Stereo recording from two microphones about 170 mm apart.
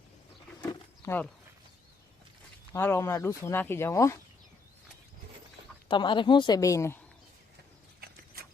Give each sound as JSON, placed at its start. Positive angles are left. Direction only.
{"t": 0.6, "sound": "a sound", "side_deg": 20}
{"t": 2.7, "sound": "speech", "side_deg": 15}
{"t": 5.9, "sound": "speech", "side_deg": 30}